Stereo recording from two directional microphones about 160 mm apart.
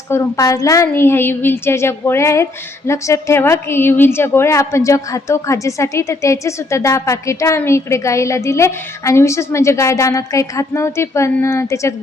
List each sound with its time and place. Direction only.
0.1 s a woman's voice: 20° left (ahead or behind)